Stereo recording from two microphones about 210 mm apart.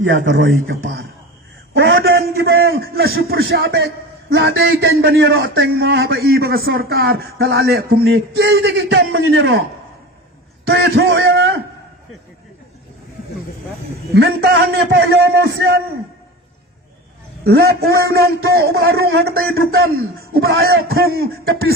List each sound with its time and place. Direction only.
0.0 s a man's voice: 65° right (ahead or behind)
10.7 s a man's voice: 50° right (ahead or behind); by 11.4 s 65° right (ahead or behind)
14.2 s a man's voice: 50° right (ahead or behind)
17.4 s a man's voice: 50° right (ahead or behind)